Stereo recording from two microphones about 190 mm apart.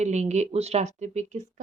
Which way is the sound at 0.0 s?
35° right (ahead or behind).